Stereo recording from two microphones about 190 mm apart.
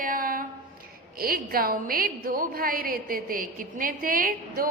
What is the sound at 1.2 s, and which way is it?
A woman's voice, 50° right (ahead or behind).